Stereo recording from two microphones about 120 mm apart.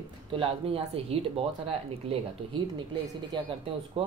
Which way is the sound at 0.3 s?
50° right (ahead or behind).